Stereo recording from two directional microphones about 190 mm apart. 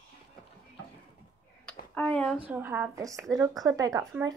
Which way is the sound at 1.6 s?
5° left (ahead or behind).